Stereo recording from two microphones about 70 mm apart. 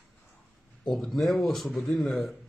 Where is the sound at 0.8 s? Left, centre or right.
Centre.